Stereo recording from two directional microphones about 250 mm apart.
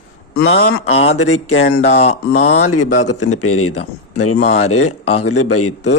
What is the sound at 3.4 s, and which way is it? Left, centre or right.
Speech, left.